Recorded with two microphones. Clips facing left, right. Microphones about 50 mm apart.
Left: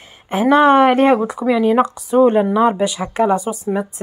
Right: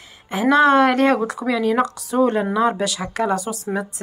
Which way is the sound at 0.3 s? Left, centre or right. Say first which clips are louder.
Left 3 dB; left.